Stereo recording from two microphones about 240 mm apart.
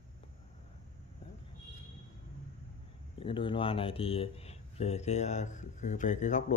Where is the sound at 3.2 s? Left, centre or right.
Left.